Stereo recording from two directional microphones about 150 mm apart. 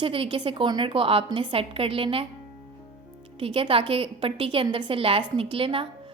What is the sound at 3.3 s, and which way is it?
A woman's voice, 35° right (ahead or behind).